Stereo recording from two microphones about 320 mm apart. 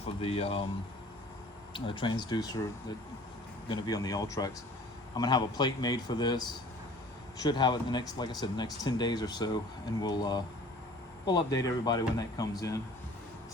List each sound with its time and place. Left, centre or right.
0.0 s speech: centre
1.7 s speech: centre
3.7 s speech: centre